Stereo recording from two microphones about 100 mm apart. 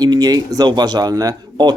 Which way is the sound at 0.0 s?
40° right (ahead or behind).